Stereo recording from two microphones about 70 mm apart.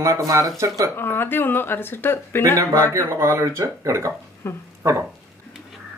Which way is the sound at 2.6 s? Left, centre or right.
Right.